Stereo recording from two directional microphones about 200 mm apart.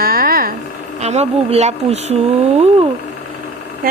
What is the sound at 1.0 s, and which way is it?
Speech, 30° right (ahead or behind).